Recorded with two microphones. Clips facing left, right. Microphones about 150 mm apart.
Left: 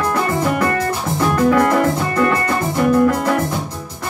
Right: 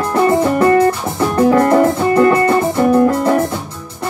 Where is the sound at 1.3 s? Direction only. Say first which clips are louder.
Right 4 dB; 30° right (ahead or behind).